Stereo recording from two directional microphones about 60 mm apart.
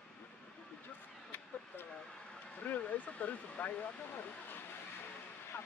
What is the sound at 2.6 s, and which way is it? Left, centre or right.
Speech, left.